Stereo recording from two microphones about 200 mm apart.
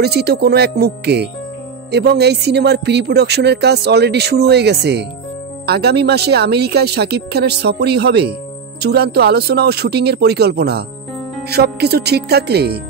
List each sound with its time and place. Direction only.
0.0 s speech: 55° right (ahead or behind)